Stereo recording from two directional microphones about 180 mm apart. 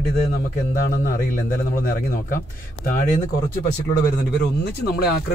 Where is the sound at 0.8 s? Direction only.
55° left (ahead or behind).